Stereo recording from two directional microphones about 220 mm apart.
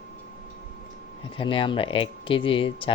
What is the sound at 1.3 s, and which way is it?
Speech, 25° left (ahead or behind).